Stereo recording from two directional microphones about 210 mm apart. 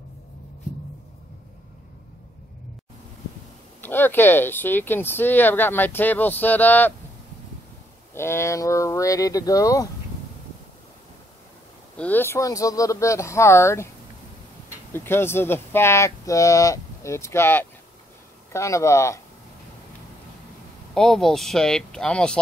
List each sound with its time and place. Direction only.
3.8 s speech: 10° left (ahead or behind)
8.1 s speech: 10° left (ahead or behind)
12.0 s speech: 10° left (ahead or behind)
14.9 s speech: 10° left (ahead or behind)
20.9 s speech: centre (ahead or behind)